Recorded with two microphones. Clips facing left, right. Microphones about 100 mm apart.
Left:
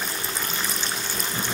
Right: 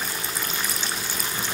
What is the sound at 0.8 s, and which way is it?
Pour, centre (ahead or behind).